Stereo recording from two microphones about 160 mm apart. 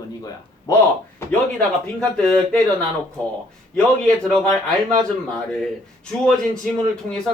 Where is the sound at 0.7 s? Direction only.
20° left (ahead or behind).